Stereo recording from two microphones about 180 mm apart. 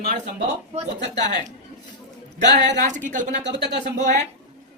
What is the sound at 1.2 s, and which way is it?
Speech, 40° right (ahead or behind).